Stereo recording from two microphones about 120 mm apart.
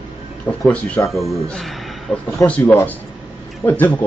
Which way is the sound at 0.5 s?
15° left (ahead or behind).